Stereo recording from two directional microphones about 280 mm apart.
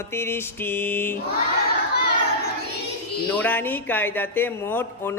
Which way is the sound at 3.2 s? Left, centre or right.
Centre.